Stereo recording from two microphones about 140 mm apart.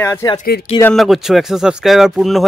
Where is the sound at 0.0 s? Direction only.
20° left (ahead or behind).